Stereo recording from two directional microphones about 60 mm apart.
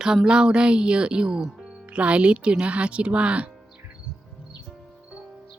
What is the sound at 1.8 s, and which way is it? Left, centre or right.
Speech, right.